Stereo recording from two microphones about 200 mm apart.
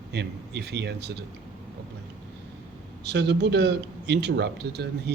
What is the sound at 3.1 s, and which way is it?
Speech, 60° right (ahead or behind).